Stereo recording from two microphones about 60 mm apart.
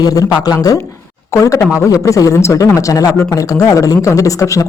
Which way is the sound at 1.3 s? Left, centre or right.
Left.